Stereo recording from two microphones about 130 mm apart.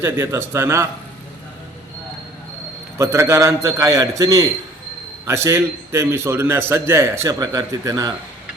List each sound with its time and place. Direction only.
0.0 s a man's voice: 20° right (ahead or behind)
3.0 s a man's voice: 20° right (ahead or behind)